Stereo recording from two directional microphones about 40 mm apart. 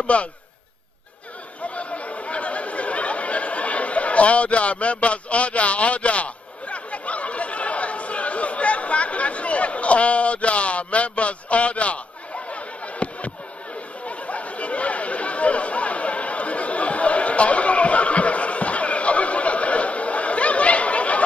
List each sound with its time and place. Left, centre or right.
0.0 s a man's voice: left
1.6 s chatter: left
12.4 s a sound: left
14.0 s chatter: left